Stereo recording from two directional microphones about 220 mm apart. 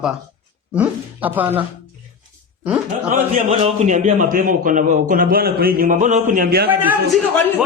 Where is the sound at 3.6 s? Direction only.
30° right (ahead or behind).